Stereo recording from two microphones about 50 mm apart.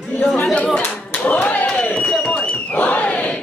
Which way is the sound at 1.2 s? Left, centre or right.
Left.